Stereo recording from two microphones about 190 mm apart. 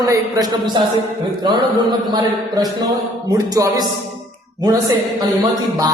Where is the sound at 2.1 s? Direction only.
20° right (ahead or behind).